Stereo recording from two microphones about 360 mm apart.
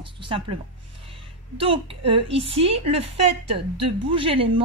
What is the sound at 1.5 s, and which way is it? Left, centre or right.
A woman's voice, centre.